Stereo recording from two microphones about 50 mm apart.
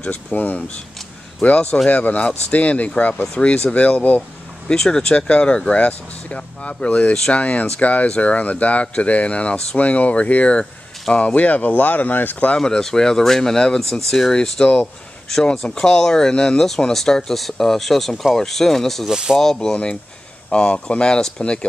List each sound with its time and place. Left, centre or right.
0.0 s speech: left
0.6 s speech: left
1.9 s speech: left
12.5 s speech: centre
14.3 s speech: centre
19.0 s speech: centre
19.3 s speech: centre